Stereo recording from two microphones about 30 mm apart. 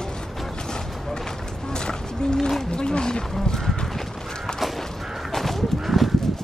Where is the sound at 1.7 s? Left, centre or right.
Left.